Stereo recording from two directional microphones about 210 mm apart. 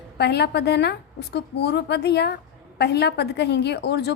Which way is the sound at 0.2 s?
50° left (ahead or behind).